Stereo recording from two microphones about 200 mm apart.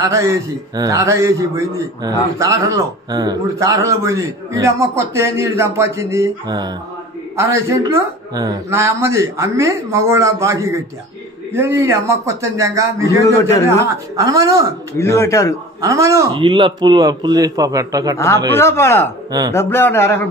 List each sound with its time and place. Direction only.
0.0 s a man's voice: 15° right (ahead or behind)
13.2 s a man's voice: 15° left (ahead or behind)
14.1 s a man's voice: 15° right (ahead or behind)
15.0 s a man's voice: 15° left (ahead or behind)
15.8 s a man's voice: 15° right (ahead or behind)
18.1 s a man's voice: 15° left (ahead or behind)